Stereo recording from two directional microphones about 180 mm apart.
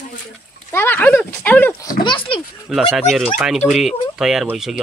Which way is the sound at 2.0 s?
30° left (ahead or behind).